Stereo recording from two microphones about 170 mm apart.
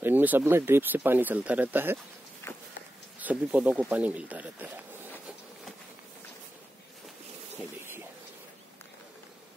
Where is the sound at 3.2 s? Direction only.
5° right (ahead or behind).